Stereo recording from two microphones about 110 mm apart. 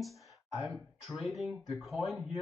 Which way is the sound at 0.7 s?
Centre (ahead or behind).